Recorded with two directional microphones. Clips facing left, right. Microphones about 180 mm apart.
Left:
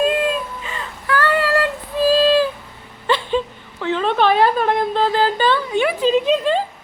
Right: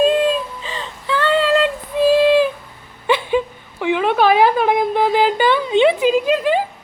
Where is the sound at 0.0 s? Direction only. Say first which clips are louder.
Right 3 dB; 25° right (ahead or behind).